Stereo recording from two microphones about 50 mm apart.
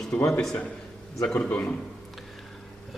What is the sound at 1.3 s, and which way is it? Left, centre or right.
Speech, left.